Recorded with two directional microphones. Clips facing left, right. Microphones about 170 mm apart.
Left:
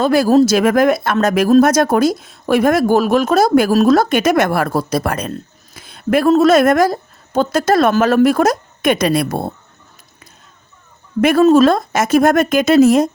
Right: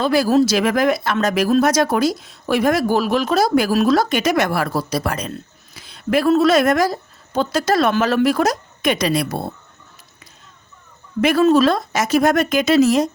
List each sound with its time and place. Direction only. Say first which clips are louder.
0.0 s speech: left 4 dB; 50° left (ahead or behind)
11.2 s speech: left 4 dB; 50° left (ahead or behind)